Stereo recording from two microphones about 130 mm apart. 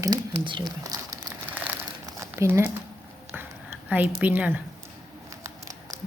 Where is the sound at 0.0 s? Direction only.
35° right (ahead or behind).